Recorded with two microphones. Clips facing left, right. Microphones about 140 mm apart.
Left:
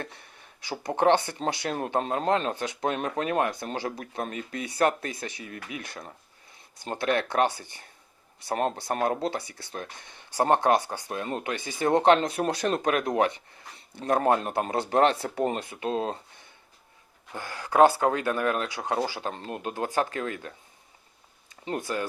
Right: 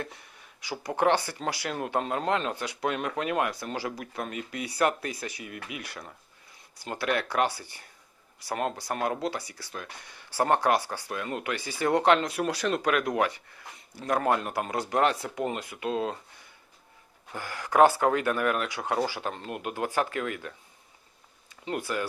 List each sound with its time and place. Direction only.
0.7 s speech: 25° left (ahead or behind)
8.5 s speech: 35° left (ahead or behind)
21.5 s a sound: 35° left (ahead or behind)
21.8 s speech: 30° left (ahead or behind)